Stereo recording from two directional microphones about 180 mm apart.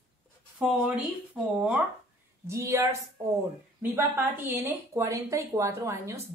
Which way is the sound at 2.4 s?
15° right (ahead or behind).